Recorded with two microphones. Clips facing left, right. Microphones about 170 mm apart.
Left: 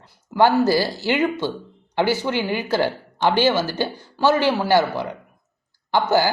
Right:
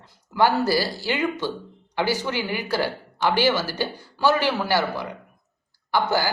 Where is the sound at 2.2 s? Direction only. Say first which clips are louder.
Left 4 dB; 15° left (ahead or behind).